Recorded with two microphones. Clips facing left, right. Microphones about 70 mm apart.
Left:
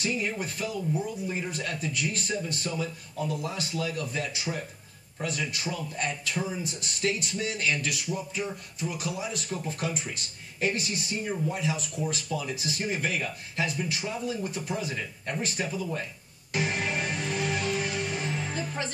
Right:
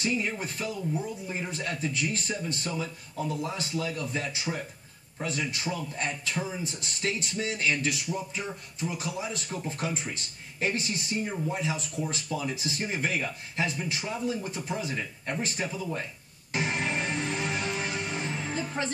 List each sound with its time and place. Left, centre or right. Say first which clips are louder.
0.0 s speech: even; right
16.5 s music: even; right